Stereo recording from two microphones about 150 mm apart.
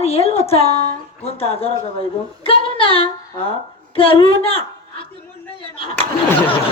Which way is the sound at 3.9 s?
35° left (ahead or behind).